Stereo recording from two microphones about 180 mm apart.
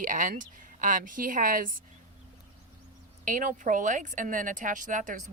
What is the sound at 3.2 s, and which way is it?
A woman's voice, 50° right (ahead or behind).